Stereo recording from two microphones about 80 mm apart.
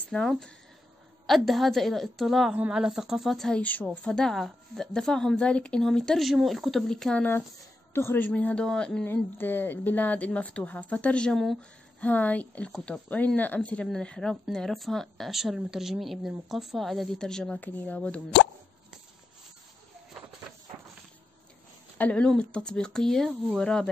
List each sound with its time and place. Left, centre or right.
0.1 s speech: centre
7.2 s a woman's voice: left
8.3 s speech: centre
9.0 s a woman's voice: left; by 11.5 s centre
12.0 s speech: centre
17.6 s a woman's voice: left
21.9 s speech: centre